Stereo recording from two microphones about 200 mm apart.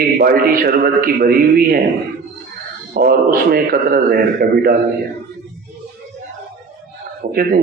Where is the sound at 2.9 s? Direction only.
50° right (ahead or behind).